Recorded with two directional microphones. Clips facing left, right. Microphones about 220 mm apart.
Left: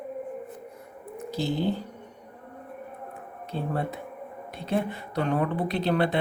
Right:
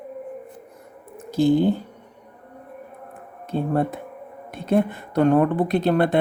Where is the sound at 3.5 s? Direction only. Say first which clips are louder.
Right 8 dB; 50° right (ahead or behind).